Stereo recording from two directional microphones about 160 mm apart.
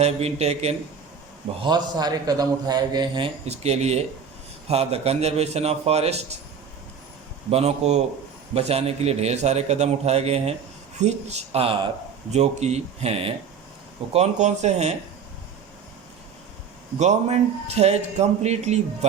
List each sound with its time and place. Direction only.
0.0 s a man's voice: 40° right (ahead or behind)
1.6 s a man's voice: 25° right (ahead or behind)
7.5 s a man's voice: 45° right (ahead or behind)
17.0 s a man's voice: 45° right (ahead or behind)